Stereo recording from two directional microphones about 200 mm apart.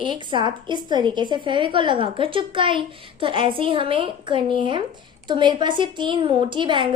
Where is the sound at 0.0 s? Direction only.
25° right (ahead or behind).